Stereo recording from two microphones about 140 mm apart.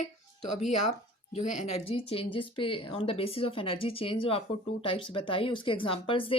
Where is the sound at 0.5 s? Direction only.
55° left (ahead or behind).